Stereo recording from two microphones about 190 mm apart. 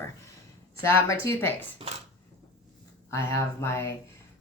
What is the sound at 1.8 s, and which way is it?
Speech, 30° right (ahead or behind).